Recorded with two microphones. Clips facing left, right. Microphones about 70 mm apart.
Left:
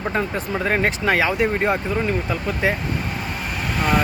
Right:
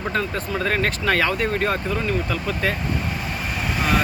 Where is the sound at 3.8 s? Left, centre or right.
Centre.